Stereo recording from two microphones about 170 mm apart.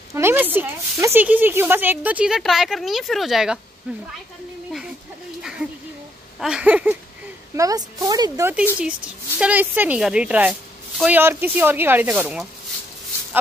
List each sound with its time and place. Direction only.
0.1 s a woman's voice: 15° right (ahead or behind)
5.4 s a sound: 5° right (ahead or behind)
6.4 s a woman's voice: 5° right (ahead or behind)
7.5 s a woman's voice: 20° right (ahead or behind)